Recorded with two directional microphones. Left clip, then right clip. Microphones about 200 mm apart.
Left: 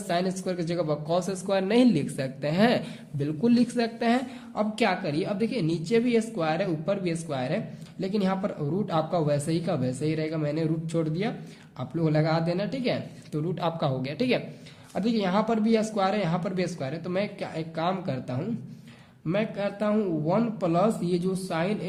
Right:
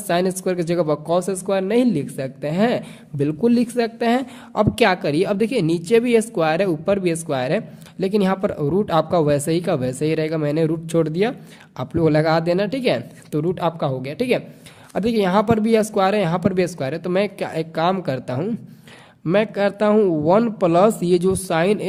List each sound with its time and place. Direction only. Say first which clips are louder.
0.1 s speech: right 8 dB; 40° right (ahead or behind)